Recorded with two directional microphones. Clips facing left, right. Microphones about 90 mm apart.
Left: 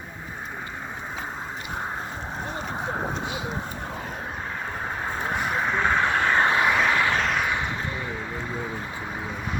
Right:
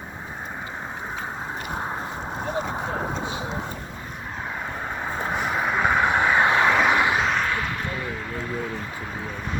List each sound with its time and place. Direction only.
5.3 s vehicle: 10° right (ahead or behind)
7.2 s vehicle: centre (ahead or behind)
7.4 s a sound: 20° left (ahead or behind)